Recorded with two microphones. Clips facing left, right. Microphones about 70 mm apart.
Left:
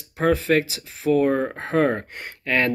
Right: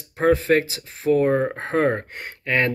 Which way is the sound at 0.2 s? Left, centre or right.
Right.